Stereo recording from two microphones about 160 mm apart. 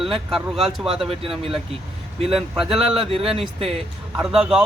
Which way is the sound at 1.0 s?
35° right (ahead or behind).